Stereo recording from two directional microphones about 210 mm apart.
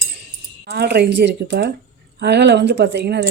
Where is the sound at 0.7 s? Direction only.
50° right (ahead or behind).